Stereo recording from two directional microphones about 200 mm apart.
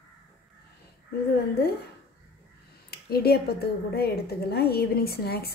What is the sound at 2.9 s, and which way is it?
A woman's voice, 50° left (ahead or behind).